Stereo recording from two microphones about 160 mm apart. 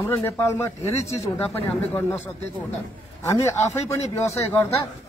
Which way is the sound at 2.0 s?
15° left (ahead or behind).